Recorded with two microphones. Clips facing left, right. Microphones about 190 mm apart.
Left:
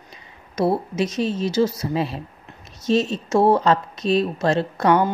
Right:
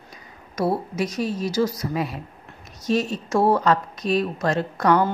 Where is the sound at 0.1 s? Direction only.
25° left (ahead or behind).